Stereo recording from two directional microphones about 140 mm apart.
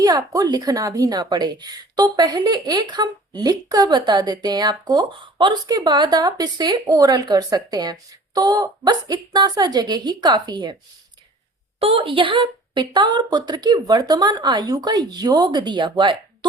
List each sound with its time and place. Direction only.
0.0 s a woman's voice: 25° right (ahead or behind)
11.8 s a woman's voice: 40° right (ahead or behind)